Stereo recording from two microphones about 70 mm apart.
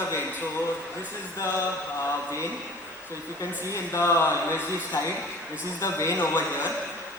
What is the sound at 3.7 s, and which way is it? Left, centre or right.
Mantra, left.